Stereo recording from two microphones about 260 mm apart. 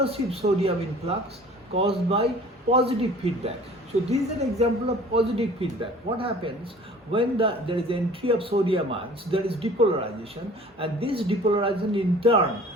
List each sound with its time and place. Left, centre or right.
0.0 s a man's voice: right